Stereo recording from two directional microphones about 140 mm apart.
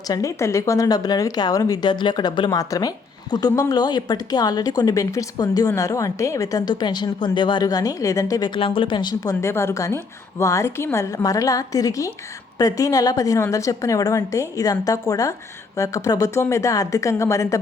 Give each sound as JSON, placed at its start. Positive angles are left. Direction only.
{"t": 0.1, "sound": "a woman's voice", "side_deg": 25}
{"t": 9.4, "sound": "a woman's voice", "side_deg": 20}